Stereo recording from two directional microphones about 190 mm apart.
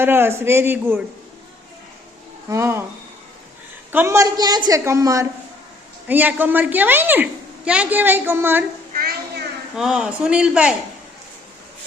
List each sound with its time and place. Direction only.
0.0 s a woman's voice: 10° right (ahead or behind)
2.5 s a woman's voice: 15° right (ahead or behind)
3.9 s a woman's voice: 15° right (ahead or behind)
8.9 s a sound: 50° right (ahead or behind)
9.7 s speech: 5° right (ahead or behind)